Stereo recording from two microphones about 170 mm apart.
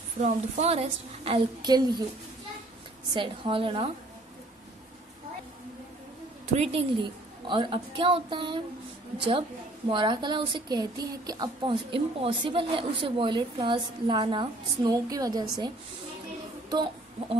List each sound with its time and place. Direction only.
0.2 s a woman's voice: 40° right (ahead or behind); by 2.0 s 25° right (ahead or behind)
3.2 s a woman's voice: 30° right (ahead or behind)
6.5 s a woman's voice: 40° right (ahead or behind)
9.8 s a woman's voice: 25° right (ahead or behind)
16.7 s speech: 25° right (ahead or behind)